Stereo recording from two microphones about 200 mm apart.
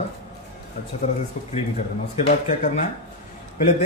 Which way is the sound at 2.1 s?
35° left (ahead or behind).